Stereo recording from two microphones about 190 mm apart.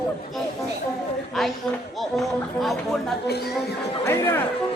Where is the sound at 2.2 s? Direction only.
Centre (ahead or behind).